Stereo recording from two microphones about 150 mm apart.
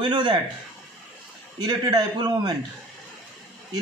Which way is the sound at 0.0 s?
35° right (ahead or behind).